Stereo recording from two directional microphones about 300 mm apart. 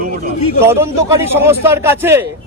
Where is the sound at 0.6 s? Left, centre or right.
Centre.